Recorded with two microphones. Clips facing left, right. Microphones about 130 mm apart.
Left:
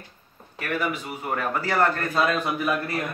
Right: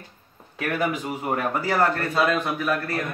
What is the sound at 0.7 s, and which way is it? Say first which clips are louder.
Speech: right 2 dB; 50° right (ahead or behind).